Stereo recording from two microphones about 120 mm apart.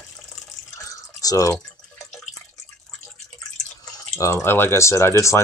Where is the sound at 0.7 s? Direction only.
30° left (ahead or behind).